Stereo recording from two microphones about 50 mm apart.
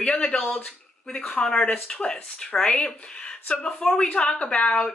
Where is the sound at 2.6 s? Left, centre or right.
Left.